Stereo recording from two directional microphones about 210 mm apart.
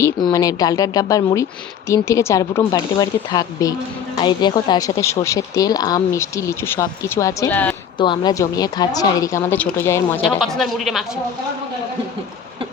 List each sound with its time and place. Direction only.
0.0 s speech: 20° left (ahead or behind)
7.9 s speech: 20° left (ahead or behind)
10.2 s speech: centre (ahead or behind)